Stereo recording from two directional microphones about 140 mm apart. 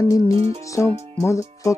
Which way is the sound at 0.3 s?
45° right (ahead or behind).